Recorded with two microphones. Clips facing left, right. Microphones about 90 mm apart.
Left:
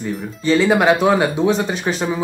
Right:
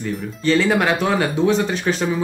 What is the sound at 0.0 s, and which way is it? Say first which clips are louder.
Speech: even; 10° left (ahead or behind).